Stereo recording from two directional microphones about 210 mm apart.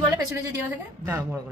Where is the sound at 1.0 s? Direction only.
10° right (ahead or behind).